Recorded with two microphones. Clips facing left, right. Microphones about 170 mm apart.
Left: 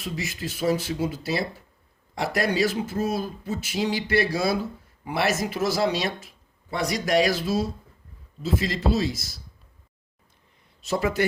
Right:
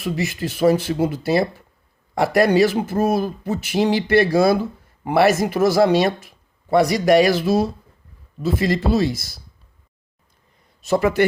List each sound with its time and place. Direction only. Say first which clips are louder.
0.0 s speech: right 8 dB; 65° right (ahead or behind)
6.7 s speech: right 10 dB; 70° right (ahead or behind)
10.8 s speech: right 7 dB; 55° right (ahead or behind)